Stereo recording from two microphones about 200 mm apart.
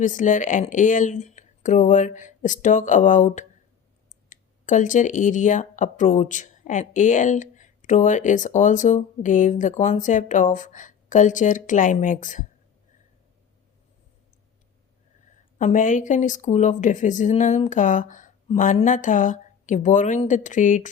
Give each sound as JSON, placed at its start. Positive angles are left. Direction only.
{"t": 0.0, "sound": "speech", "side_deg": 40}
{"t": 15.5, "sound": "speech", "side_deg": 40}